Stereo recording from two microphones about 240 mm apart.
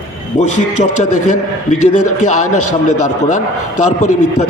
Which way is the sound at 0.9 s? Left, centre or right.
Left.